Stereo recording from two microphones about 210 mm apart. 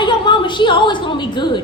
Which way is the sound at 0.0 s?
20° left (ahead or behind).